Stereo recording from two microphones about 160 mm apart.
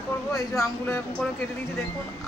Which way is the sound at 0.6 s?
15° left (ahead or behind).